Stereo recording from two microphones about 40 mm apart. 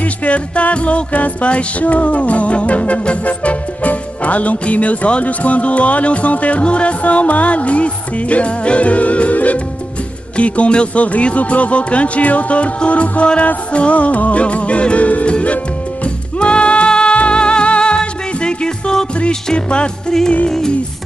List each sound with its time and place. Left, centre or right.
0.0 s music: left
20.1 s music: centre